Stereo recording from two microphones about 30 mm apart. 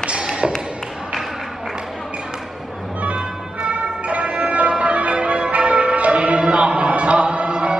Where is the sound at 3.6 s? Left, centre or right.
Right.